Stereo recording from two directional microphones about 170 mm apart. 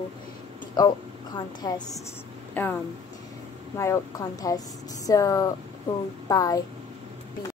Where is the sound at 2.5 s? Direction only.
10° left (ahead or behind).